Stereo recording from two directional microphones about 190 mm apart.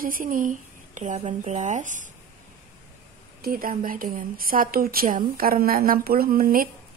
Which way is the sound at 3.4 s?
50° right (ahead or behind).